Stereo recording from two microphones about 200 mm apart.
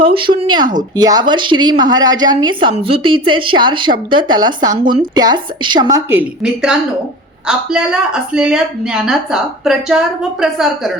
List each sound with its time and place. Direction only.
0.0 s a woman's voice: 25° right (ahead or behind)
6.1 s a woman's voice: 5° right (ahead or behind)